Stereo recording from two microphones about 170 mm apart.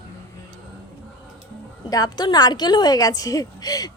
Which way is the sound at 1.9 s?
25° left (ahead or behind).